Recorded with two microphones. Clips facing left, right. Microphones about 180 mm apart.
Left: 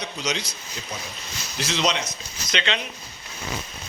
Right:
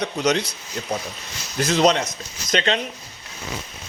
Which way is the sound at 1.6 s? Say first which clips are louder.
Right 7 dB; 50° right (ahead or behind).